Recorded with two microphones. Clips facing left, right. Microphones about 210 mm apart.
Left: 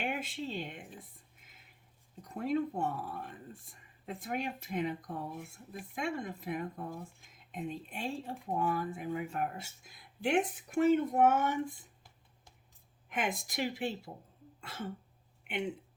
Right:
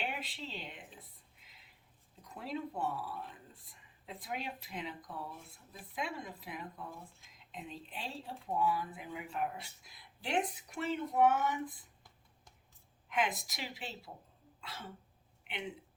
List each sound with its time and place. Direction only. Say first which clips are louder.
0.0 s speech: left 5 dB; 50° left (ahead or behind)
2.2 s speech: left 8 dB; 45° left (ahead or behind)
5.3 s speech: left 8 dB; 15° left (ahead or behind)
5.9 s speech: left 4 dB; 45° left (ahead or behind)
13.1 s a sound: even; 50° left (ahead or behind)
13.5 s speech: left 10 dB; 50° left (ahead or behind)
14.6 s throat clearing: left 6 dB; 50° left (ahead or behind)